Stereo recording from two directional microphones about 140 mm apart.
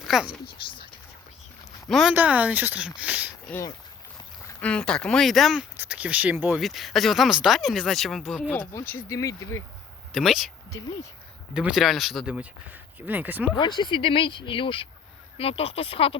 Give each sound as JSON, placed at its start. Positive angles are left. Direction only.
{"t": 0.1, "sound": "speech", "side_deg": -5}
{"t": 1.9, "sound": "speech", "side_deg": 0}
{"t": 4.6, "sound": "speech", "side_deg": 5}
{"t": 6.6, "sound": "speech", "side_deg": 0}
{"t": 8.7, "sound": "speech", "side_deg": 20}
{"t": 10.1, "sound": "speech", "side_deg": 0}
{"t": 10.7, "sound": "speech", "side_deg": 25}
{"t": 11.5, "sound": "speech", "side_deg": -5}
{"t": 13.6, "sound": "speech", "side_deg": 35}